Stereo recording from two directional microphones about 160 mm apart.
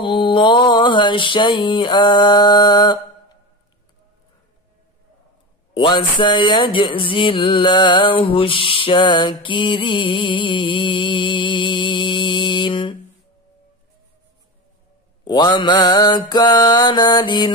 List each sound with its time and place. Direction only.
0.0 s mantra: 30° left (ahead or behind)
5.8 s music: 30° left (ahead or behind)
15.2 s mantra: 25° left (ahead or behind)